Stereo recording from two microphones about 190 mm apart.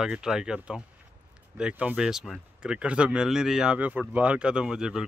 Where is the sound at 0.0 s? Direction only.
5° right (ahead or behind).